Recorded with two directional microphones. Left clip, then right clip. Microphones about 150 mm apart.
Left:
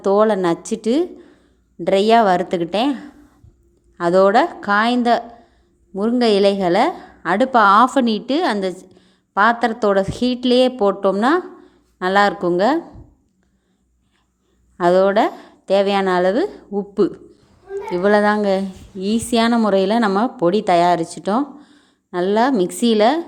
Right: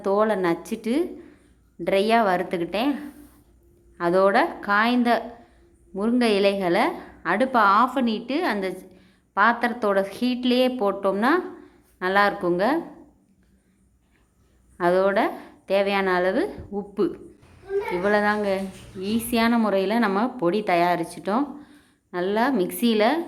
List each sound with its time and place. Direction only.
0.0 s a woman's voice: 35° left (ahead or behind)
14.8 s a woman's voice: 35° left (ahead or behind)